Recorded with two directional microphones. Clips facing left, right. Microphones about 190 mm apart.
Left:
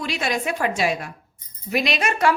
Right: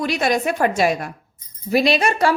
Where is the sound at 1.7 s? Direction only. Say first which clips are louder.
Right 6 dB; 35° right (ahead or behind).